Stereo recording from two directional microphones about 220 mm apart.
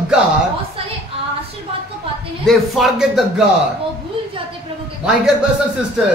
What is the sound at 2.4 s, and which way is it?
Speech, centre (ahead or behind).